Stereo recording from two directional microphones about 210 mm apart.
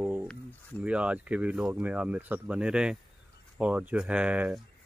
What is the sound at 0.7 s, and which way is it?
Speech, 5° right (ahead or behind).